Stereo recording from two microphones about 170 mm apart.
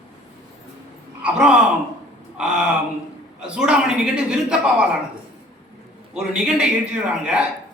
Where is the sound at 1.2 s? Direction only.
5° right (ahead or behind).